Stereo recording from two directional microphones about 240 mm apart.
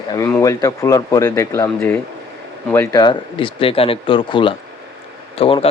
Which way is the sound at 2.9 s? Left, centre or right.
Centre.